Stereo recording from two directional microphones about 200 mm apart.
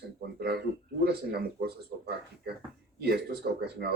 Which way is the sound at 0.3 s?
55° right (ahead or behind).